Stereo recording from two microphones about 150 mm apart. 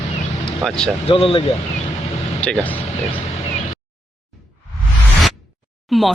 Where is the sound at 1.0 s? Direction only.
40° left (ahead or behind).